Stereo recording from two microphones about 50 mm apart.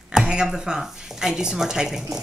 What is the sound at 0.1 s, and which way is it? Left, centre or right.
Speech, centre.